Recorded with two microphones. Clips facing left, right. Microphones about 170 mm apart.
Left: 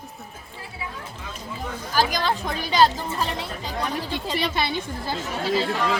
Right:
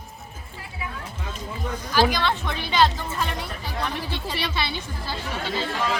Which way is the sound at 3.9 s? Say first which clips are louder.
Left 3 dB; 45° left (ahead or behind).